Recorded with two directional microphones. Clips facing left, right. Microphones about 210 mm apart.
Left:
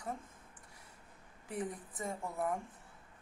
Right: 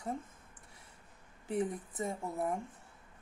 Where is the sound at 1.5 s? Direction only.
25° right (ahead or behind).